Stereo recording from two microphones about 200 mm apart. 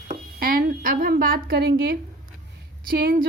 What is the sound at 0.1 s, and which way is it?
A woman's voice, 45° right (ahead or behind).